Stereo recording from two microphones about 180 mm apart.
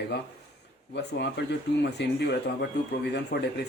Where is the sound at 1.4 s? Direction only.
70° left (ahead or behind).